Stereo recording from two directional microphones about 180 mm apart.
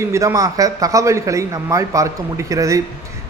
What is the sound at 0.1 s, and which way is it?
A man's voice, 15° right (ahead or behind).